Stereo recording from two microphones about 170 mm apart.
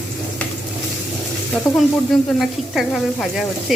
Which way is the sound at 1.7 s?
20° left (ahead or behind).